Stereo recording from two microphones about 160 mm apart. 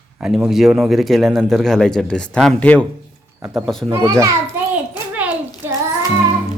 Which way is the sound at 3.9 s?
20° right (ahead or behind).